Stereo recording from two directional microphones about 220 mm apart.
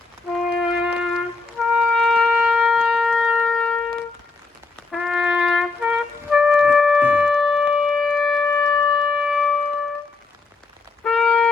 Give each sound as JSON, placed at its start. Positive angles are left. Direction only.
{"t": 0.3, "sound": "wind instrument", "side_deg": 0}
{"t": 1.5, "sound": "music", "side_deg": 0}
{"t": 4.9, "sound": "music", "side_deg": 0}
{"t": 8.4, "sound": "shofar", "side_deg": 15}
{"t": 9.0, "sound": "music", "side_deg": 0}
{"t": 11.0, "sound": "a sound", "side_deg": 5}